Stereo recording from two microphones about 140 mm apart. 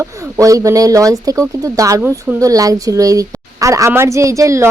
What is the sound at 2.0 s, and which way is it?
Speech, 10° right (ahead or behind).